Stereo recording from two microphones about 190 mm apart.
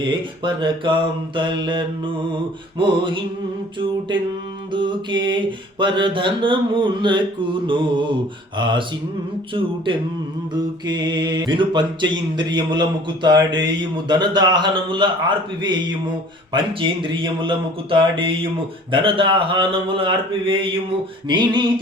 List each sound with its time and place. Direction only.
0.0 s mantra: 25° right (ahead or behind)
4.7 s mantra: 25° right (ahead or behind)
10.8 s mantra: 20° right (ahead or behind)